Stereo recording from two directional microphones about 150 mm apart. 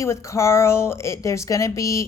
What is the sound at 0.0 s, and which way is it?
A woman's voice, 20° left (ahead or behind).